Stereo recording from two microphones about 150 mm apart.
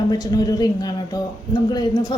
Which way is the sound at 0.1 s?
25° left (ahead or behind).